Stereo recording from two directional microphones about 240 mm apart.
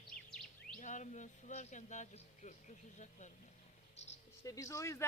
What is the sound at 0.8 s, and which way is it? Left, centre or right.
Speech, left.